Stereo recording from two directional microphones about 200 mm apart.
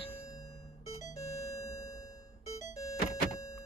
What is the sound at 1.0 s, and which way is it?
Music, 15° left (ahead or behind).